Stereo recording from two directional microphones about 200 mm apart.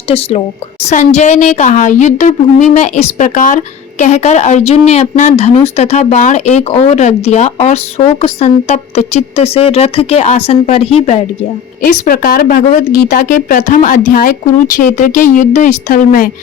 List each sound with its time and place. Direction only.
0.1 s a woman's voice: 30° left (ahead or behind)
11.8 s a woman's voice: 45° left (ahead or behind)